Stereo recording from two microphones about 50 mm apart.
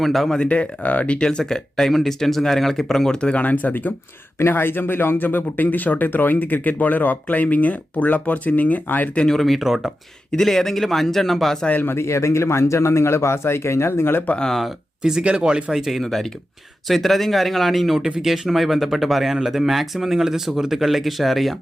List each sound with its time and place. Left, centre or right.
0.0 s speech: centre
0.3 s speech: left
3.2 s speech: left
3.4 s speech: left
4.4 s speech: left
9.1 s speech: centre
9.6 s speech: centre
10.3 s speech: centre
11.9 s a man's voice: left
15.2 s speech: right
15.7 s speech: centre